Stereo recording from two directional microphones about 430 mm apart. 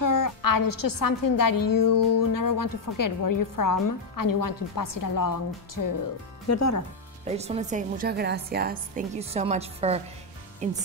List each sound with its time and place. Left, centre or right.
0.0 s a woman's voice: left
7.2 s a woman's voice: centre